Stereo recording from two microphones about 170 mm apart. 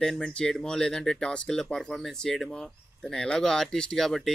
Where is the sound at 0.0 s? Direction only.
5° left (ahead or behind).